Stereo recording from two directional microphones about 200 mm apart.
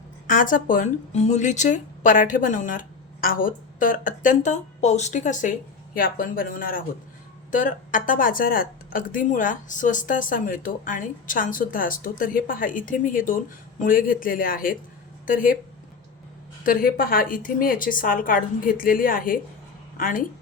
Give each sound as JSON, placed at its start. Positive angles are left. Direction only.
{"t": 0.3, "sound": "a woman's voice", "side_deg": 40}
{"t": 16.6, "sound": "a woman's voice", "side_deg": 45}